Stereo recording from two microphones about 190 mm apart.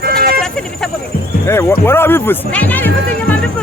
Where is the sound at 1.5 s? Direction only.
15° left (ahead or behind).